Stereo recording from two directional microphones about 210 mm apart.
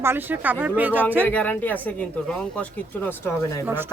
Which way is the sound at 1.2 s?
10° left (ahead or behind).